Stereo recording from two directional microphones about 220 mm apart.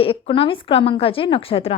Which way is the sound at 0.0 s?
25° left (ahead or behind).